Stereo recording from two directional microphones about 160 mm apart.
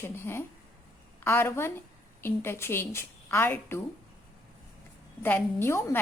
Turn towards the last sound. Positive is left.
turn(degrees=15)  # may be behind; listen again after turning